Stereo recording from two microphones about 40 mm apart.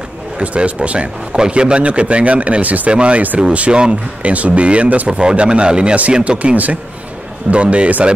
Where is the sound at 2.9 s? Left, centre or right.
Right.